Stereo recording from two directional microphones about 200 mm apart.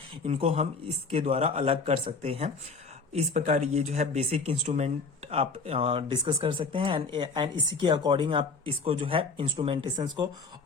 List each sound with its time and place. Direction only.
0.3 s speech: 30° right (ahead or behind)